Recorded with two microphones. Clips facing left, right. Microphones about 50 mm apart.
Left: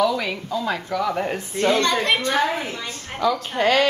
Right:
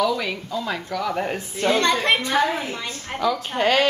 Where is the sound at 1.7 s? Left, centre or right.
Centre.